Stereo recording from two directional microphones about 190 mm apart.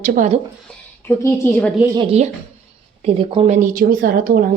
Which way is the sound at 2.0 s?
35° right (ahead or behind).